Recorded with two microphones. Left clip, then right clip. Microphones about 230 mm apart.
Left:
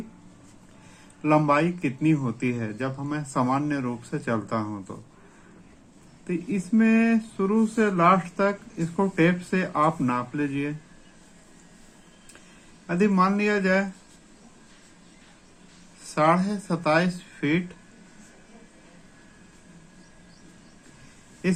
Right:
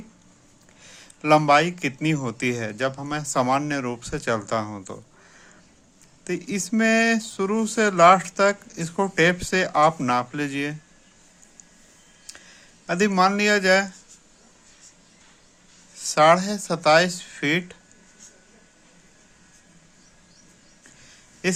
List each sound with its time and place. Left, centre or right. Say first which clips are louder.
1.2 s speech: right 4 dB; right
6.2 s speech: right 2 dB; right
12.9 s speech: right 3 dB; right
16.1 s speech: right 5 dB; right